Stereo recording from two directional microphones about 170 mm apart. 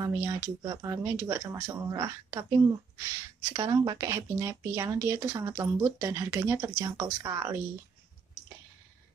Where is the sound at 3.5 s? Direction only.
20° right (ahead or behind).